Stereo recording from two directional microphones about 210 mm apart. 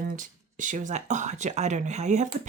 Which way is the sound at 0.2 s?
35° right (ahead or behind).